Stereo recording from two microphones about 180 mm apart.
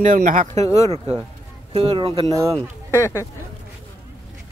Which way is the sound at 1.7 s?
30° right (ahead or behind).